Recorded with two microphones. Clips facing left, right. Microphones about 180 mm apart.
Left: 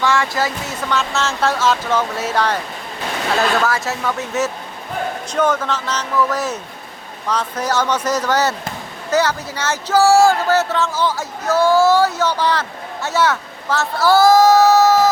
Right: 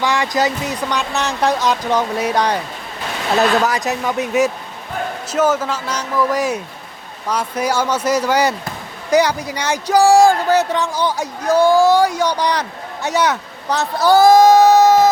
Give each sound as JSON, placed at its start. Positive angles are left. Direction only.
{"t": 0.0, "sound": "speech", "side_deg": -15}
{"t": 3.6, "sound": "speech", "side_deg": -15}